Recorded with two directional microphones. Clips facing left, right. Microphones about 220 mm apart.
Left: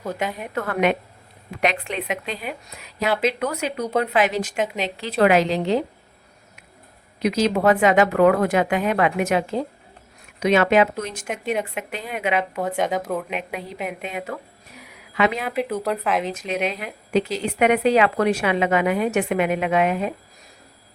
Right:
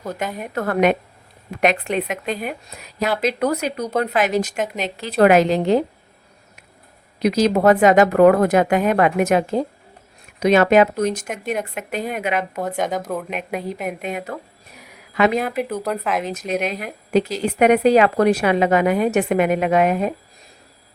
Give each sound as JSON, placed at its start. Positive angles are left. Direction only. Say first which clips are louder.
{"t": 0.0, "sound": "speech", "louder": "even", "side_deg": 0}
{"t": 0.5, "sound": "a woman's voice", "louder": "right 4 dB", "side_deg": -40}
{"t": 4.6, "sound": "speech", "louder": "even", "side_deg": 0}
{"t": 4.9, "sound": "a woman's voice", "louder": "right 4 dB", "side_deg": -45}
{"t": 7.2, "sound": "a woman's voice", "louder": "right 3 dB", "side_deg": -40}
{"t": 12.4, "sound": "speech", "louder": "even", "side_deg": 0}
{"t": 13.5, "sound": "a woman's voice", "louder": "right 4 dB", "side_deg": -45}
{"t": 15.5, "sound": "speech", "louder": "even", "side_deg": 0}
{"t": 16.3, "sound": "a woman's voice", "louder": "right 2 dB", "side_deg": -40}